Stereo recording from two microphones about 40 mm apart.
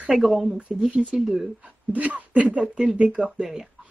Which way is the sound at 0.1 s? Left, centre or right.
Centre.